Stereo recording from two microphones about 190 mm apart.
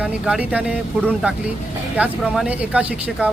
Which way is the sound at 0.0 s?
5° right (ahead or behind).